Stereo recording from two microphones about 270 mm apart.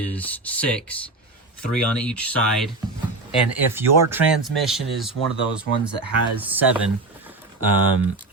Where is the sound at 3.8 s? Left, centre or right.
Centre.